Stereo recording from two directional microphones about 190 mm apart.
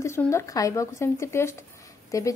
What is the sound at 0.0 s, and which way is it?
A woman's voice, 15° left (ahead or behind).